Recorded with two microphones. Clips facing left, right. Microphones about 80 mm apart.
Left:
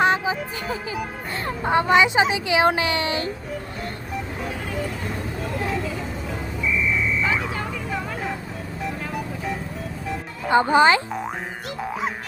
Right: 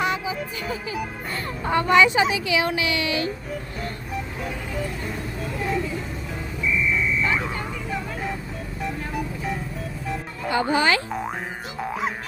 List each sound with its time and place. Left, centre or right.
0.0 s music: left
1.6 s a woman's voice: left
6.7 s buzzer: centre
8.8 s music: centre
10.5 s speech: left
11.8 s music: centre